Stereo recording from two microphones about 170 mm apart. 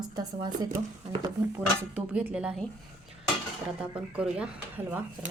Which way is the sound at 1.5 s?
10° right (ahead or behind).